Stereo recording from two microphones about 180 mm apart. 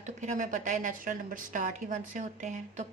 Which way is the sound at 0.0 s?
45° right (ahead or behind).